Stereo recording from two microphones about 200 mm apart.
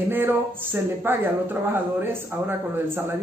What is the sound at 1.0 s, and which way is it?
A man's voice, 10° right (ahead or behind).